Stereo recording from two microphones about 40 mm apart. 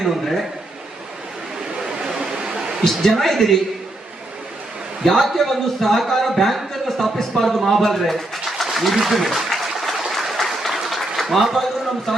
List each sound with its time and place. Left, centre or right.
0.0 s speech: centre
1.8 s a sound: centre
2.8 s a woman's voice: centre
5.0 s a man's voice: centre
10.0 s applause: centre
11.2 s a man's voice: centre